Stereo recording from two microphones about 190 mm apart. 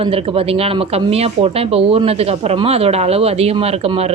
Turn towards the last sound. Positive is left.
turn(degrees=-30)  # may be behind; listen again after turning